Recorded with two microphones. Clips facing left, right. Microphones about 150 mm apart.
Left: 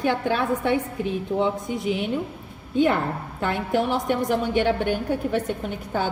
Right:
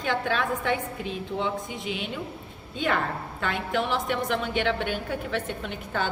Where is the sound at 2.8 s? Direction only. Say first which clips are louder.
Left 4 dB; 20° left (ahead or behind).